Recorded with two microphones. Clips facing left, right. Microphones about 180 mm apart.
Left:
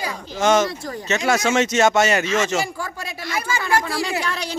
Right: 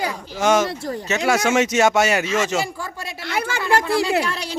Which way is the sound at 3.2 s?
65° right (ahead or behind).